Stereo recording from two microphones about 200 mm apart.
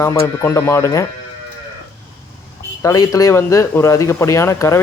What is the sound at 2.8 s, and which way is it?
Speech, 15° left (ahead or behind).